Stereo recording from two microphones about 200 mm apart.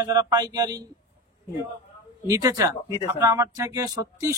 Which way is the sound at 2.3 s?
15° right (ahead or behind).